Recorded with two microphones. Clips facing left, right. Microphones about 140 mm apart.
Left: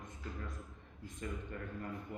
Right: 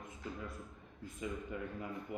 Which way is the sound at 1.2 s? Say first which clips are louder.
Right 3 dB; 10° right (ahead or behind).